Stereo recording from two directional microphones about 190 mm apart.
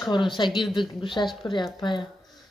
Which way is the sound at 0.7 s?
25° left (ahead or behind).